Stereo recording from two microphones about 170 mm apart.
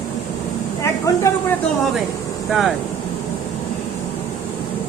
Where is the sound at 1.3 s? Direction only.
20° left (ahead or behind).